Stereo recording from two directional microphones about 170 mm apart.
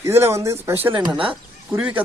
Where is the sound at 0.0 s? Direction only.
15° right (ahead or behind).